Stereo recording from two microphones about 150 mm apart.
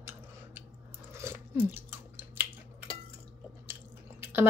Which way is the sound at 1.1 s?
15° right (ahead or behind).